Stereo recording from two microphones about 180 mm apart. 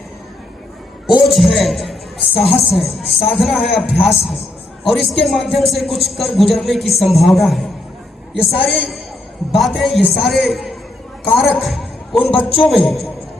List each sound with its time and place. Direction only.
1.2 s a man's voice: centre (ahead or behind)
12.3 s a man's voice: 30° left (ahead or behind)
12.6 s a man's voice: centre (ahead or behind)